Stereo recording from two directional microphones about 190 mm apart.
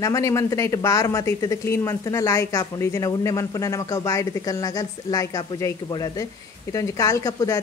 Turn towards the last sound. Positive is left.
turn(degrees=15)  # may be behind; listen again after turning